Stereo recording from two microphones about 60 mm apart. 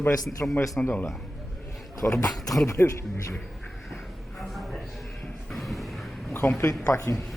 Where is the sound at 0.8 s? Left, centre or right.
Left.